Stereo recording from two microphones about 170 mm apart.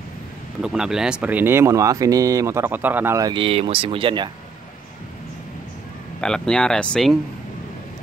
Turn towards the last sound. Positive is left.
turn(degrees=5)  # may be behind; listen again after turning